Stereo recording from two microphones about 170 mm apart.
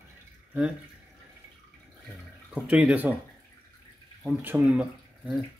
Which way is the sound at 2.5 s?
10° right (ahead or behind).